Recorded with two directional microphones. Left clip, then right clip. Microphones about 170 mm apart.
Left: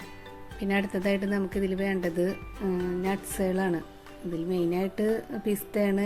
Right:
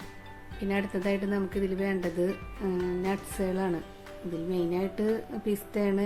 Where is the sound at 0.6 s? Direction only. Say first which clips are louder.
Left 2 dB; 15° left (ahead or behind).